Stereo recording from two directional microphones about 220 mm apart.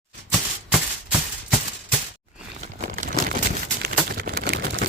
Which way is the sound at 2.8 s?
40° right (ahead or behind).